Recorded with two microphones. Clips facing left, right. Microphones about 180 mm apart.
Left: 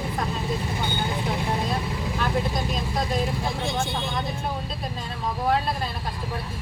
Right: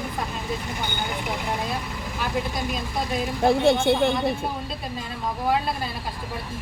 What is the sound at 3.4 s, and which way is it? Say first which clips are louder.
Speech: right 10 dB; 60° right (ahead or behind).